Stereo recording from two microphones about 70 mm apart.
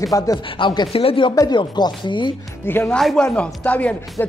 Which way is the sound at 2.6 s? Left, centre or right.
Left.